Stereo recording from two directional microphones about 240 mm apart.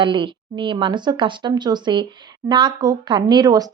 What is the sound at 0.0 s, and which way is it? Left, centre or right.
Speech, centre.